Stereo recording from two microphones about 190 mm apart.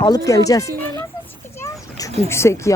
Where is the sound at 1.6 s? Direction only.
15° left (ahead or behind).